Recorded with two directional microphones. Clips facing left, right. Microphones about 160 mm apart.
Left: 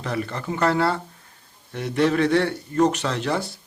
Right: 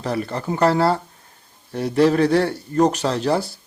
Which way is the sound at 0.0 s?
35° right (ahead or behind).